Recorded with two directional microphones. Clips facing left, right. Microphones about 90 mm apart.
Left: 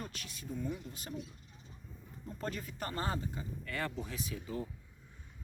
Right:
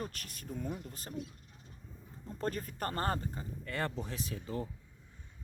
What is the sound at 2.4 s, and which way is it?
Speech, 40° right (ahead or behind).